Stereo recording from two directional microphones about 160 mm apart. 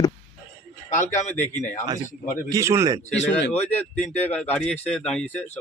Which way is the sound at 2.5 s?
20° right (ahead or behind).